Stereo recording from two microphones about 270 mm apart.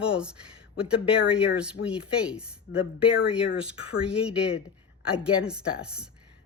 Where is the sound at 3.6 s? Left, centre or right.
Centre.